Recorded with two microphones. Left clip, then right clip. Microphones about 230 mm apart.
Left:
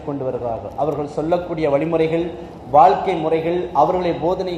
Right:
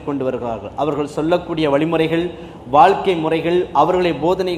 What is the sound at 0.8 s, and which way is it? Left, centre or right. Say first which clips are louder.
Speech: right 2 dB; right.